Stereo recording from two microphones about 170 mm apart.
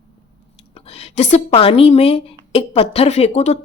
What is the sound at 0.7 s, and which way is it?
Speech, 35° left (ahead or behind).